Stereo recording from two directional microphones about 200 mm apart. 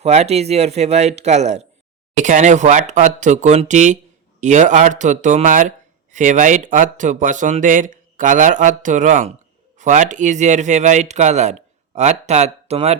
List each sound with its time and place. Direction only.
0.0 s speech: 35° right (ahead or behind)